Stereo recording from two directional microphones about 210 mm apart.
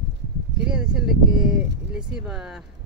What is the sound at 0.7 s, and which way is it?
Speech, 5° right (ahead or behind).